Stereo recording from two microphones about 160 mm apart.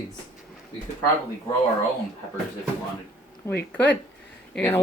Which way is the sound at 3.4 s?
15° left (ahead or behind).